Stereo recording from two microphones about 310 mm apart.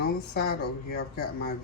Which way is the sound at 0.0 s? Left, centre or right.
Left.